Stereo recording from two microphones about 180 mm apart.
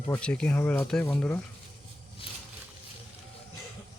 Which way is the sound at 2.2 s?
30° left (ahead or behind).